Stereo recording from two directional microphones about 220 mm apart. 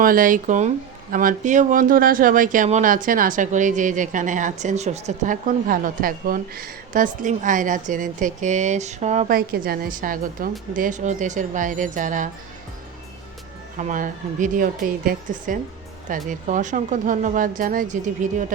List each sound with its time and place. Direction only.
0.0 s speech: 40° right (ahead or behind)
13.7 s speech: 35° right (ahead or behind)